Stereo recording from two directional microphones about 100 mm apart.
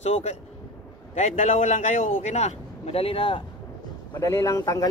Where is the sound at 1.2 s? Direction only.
90° left; by 3.4 s 65° left (ahead or behind).